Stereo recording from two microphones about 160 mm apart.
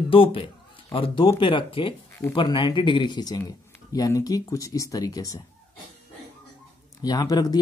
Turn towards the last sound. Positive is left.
turn(degrees=25)  # may be behind; listen again after turning